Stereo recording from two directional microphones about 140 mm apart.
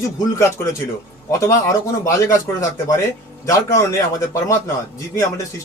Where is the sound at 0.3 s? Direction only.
20° left (ahead or behind).